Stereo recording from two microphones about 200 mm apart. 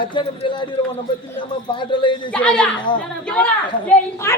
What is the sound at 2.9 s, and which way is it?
Speech, 25° left (ahead or behind).